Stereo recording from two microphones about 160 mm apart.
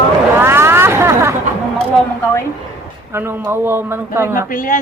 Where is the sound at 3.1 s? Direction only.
15° right (ahead or behind).